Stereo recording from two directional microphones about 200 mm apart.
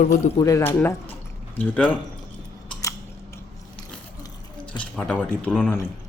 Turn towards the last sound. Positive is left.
turn(degrees=10)  # may be behind; listen again after turning